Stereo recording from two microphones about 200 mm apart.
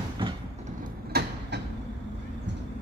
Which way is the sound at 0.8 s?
55° right (ahead or behind).